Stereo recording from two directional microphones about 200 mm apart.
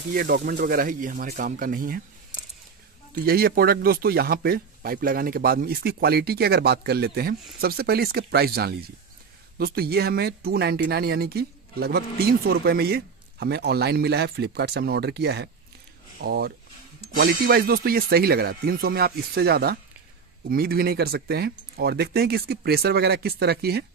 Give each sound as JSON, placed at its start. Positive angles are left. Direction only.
{"t": 0.1, "sound": "speech", "side_deg": -50}
{"t": 3.3, "sound": "speech", "side_deg": -50}